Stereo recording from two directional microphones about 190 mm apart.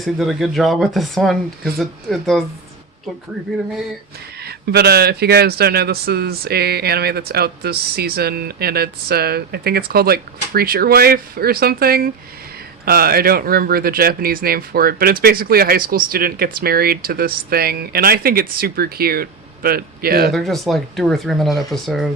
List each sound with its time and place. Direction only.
0.0 s speech: centre (ahead or behind)
3.5 s speech: centre (ahead or behind)
4.4 s speech: 55° right (ahead or behind)
20.3 s speech: centre (ahead or behind)